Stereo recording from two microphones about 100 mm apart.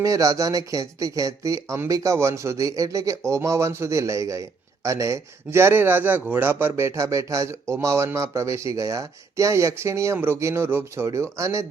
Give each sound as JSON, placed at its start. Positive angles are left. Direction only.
{"t": 0.0, "sound": "speech", "side_deg": -35}